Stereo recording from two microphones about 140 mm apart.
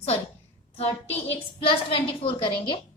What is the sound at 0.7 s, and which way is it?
A woman's voice, 45° left (ahead or behind).